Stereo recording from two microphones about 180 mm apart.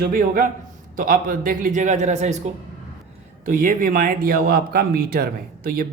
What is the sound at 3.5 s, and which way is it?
Speech, 50° right (ahead or behind).